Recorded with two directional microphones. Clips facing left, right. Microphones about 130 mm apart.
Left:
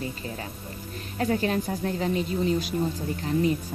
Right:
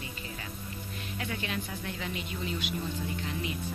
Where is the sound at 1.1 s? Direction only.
40° left (ahead or behind).